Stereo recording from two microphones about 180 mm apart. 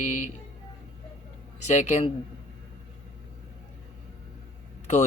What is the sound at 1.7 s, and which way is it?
Speech, 40° left (ahead or behind).